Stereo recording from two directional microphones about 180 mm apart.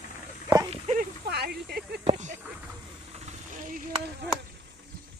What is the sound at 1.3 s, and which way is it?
Speech, 60° right (ahead or behind).